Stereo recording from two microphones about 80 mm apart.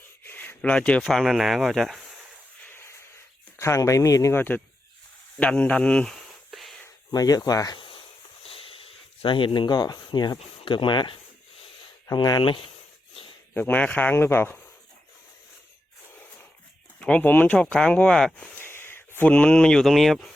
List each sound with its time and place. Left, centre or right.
0.2 s a sound: left
1.0 s speech: centre
2.6 s a sound: left
3.6 s speech: left
4.4 s speech: left
6.5 s a sound: centre
7.1 s speech: left
9.2 s speech: left
12.4 s speech: left
13.5 s speech: left
14.2 s speech: left
17.0 s speech: centre
18.5 s speech: left; by 20.3 s centre